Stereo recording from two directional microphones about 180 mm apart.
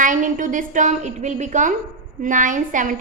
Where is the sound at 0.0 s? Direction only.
45° right (ahead or behind).